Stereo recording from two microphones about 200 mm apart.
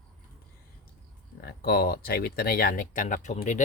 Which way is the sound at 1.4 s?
50° left (ahead or behind).